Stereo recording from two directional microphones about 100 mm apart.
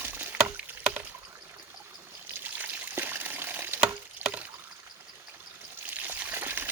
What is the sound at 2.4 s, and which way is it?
Water, 20° right (ahead or behind).